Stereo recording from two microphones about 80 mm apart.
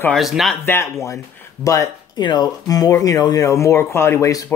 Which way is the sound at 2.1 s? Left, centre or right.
Left.